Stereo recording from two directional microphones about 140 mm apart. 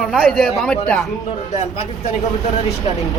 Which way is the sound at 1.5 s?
50° left (ahead or behind).